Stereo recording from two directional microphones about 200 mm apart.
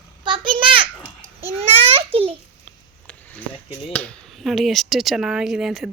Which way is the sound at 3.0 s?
10° left (ahead or behind).